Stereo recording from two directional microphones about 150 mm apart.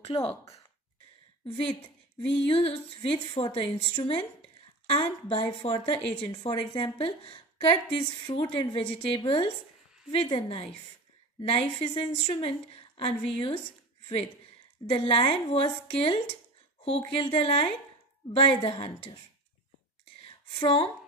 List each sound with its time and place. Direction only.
0.0 s speech: 40° left (ahead or behind)
2.2 s a woman's voice: 40° left (ahead or behind)
14.9 s a woman's voice: 40° left (ahead or behind)
20.6 s a woman's voice: 35° left (ahead or behind)